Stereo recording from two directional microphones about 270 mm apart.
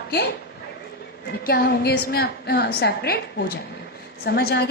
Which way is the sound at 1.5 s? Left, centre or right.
Left.